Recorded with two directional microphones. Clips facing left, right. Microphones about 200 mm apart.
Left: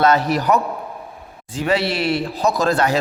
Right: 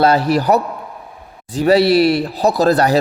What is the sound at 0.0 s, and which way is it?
Mantra, 30° right (ahead or behind).